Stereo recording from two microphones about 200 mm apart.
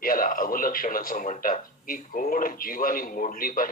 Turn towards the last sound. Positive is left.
turn(degrees=45)  # may be behind; listen again after turning